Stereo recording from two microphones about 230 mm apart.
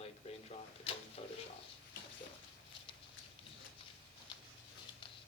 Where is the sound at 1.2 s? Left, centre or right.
Left.